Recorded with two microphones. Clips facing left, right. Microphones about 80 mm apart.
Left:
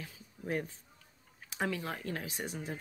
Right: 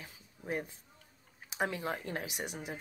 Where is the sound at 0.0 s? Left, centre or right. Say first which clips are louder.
Left 3 dB; centre.